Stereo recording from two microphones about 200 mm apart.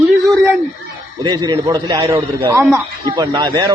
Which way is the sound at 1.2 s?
20° right (ahead or behind).